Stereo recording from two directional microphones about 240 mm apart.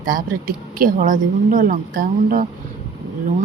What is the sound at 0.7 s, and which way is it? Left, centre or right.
Speech, right.